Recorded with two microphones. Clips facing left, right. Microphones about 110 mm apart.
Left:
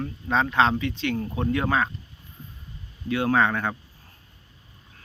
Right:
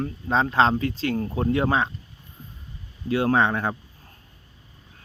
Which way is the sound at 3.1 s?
30° right (ahead or behind).